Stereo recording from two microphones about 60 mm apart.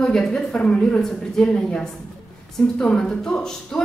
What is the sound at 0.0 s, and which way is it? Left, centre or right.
A woman's voice, centre.